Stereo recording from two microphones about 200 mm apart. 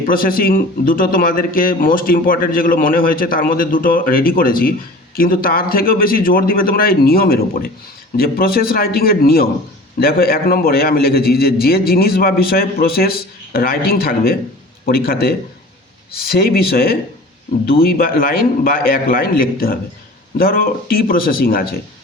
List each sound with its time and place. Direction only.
0.1 s a man's voice: 45° left (ahead or behind)